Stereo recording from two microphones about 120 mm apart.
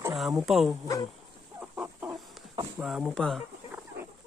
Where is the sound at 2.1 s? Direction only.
Centre (ahead or behind).